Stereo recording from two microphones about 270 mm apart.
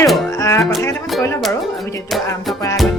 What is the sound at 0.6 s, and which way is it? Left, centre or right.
Speech, centre.